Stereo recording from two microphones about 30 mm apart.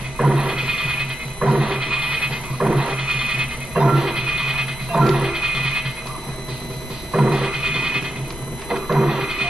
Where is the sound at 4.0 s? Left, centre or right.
Centre.